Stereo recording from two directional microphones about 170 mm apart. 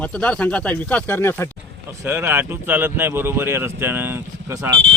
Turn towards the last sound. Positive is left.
turn(degrees=-15)  # may be behind; listen again after turning